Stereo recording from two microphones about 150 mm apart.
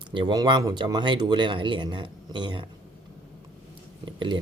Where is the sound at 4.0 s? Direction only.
30° right (ahead or behind).